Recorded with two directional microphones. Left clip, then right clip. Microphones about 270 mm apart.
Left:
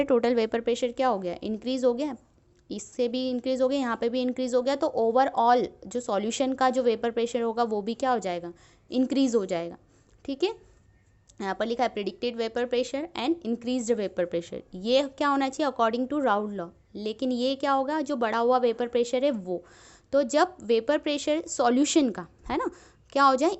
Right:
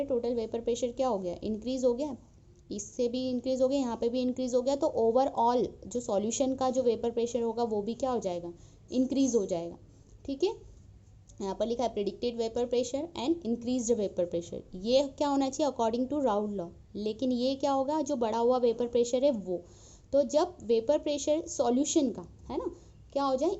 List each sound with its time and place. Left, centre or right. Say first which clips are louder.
0.2 s a woman's voice: left 7 dB; left